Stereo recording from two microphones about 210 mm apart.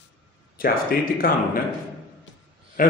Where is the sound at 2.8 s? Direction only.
40° left (ahead or behind).